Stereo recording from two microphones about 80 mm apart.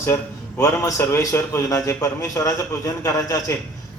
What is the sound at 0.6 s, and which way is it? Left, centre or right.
A man's voice, left.